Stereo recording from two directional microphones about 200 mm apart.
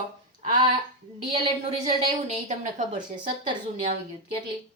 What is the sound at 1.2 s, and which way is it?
Speech, 25° right (ahead or behind).